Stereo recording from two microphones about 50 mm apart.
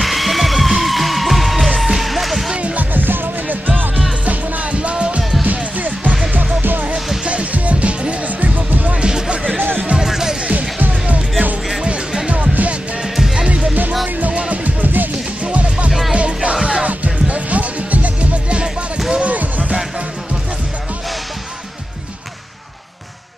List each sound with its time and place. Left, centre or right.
0.0 s music: centre
2.5 s music: right
7.2 s music: right
9.0 s music: centre
10.5 s music: right
13.1 s music: centre
14.0 s music: right